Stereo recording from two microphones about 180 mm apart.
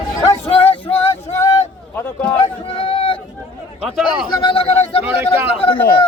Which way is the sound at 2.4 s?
30° left (ahead or behind).